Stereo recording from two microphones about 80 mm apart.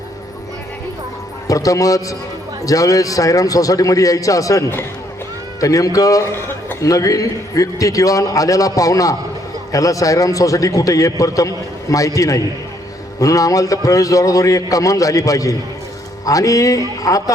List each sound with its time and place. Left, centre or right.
1.5 s a man's voice: left